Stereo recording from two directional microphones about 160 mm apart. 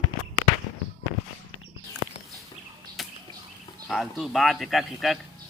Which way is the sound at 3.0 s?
Centre (ahead or behind).